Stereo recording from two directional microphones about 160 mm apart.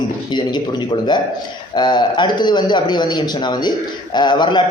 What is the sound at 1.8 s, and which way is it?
A man's voice, 30° left (ahead or behind).